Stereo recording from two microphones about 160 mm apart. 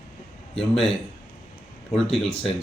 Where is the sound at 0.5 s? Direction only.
5° left (ahead or behind).